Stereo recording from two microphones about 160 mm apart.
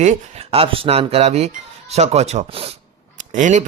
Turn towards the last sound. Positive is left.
turn(degrees=-50)  # may be behind; listen again after turning